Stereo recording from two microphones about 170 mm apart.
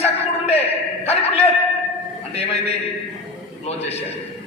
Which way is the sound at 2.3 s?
35° left (ahead or behind).